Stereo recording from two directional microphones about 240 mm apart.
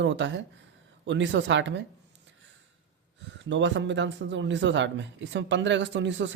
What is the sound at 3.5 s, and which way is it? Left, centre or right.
Speech, right.